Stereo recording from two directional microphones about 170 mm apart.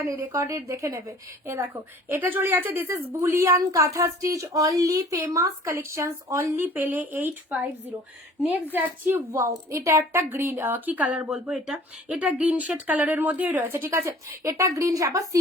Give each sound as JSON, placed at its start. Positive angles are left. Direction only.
{"t": 0.0, "sound": "a woman's voice", "side_deg": -15}
{"t": 8.7, "sound": "a woman's voice", "side_deg": -15}